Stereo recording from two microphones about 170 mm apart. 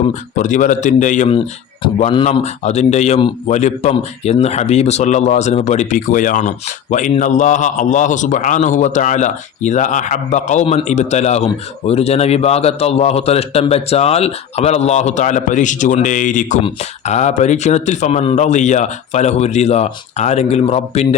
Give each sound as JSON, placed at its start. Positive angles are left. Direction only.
{"t": 0.3, "sound": "a man's voice", "side_deg": 50}
{"t": 2.0, "sound": "speech", "side_deg": 30}
{"t": 2.3, "sound": "a man's voice", "side_deg": 40}